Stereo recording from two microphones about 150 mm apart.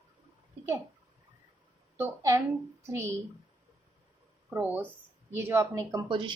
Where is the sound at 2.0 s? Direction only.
20° right (ahead or behind).